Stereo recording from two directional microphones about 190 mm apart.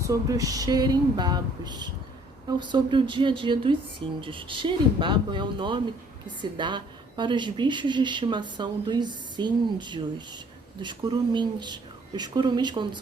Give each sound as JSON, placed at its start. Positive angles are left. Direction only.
{"t": 0.1, "sound": "a woman's voice", "side_deg": -20}